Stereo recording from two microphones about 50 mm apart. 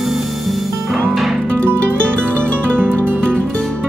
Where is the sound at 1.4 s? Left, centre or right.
Right.